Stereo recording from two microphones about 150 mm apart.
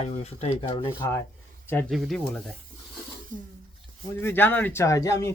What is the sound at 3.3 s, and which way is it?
Speech, 60° right (ahead or behind).